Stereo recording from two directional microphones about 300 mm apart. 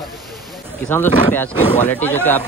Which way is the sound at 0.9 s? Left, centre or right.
Centre.